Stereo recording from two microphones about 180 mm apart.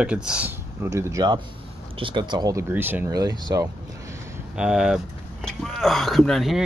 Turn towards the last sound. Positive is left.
turn(degrees=0)  # may be behind; listen again after turning